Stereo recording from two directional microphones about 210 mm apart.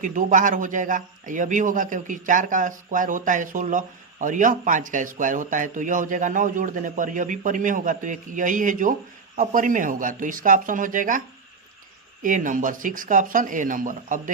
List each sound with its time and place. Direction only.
0.0 s a man's voice: 35° right (ahead or behind)
12.2 s a man's voice: 40° right (ahead or behind)